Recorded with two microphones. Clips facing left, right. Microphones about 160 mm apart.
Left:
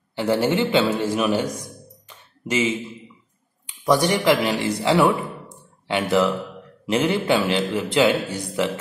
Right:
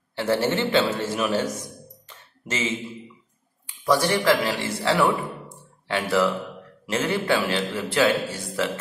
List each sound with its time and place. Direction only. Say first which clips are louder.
0.1 s a man's voice: left 2 dB; 15° left (ahead or behind)
0.9 s music: left 3 dB; 15° left (ahead or behind)
3.6 s a man's voice: left 3 dB; 20° left (ahead or behind)